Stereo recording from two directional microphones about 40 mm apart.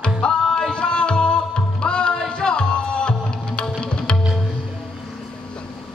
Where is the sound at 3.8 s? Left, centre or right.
Left.